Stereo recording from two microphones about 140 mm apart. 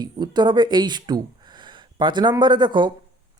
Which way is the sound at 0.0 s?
30° right (ahead or behind).